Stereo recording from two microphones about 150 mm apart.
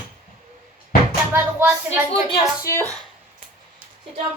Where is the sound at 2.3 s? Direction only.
20° left (ahead or behind).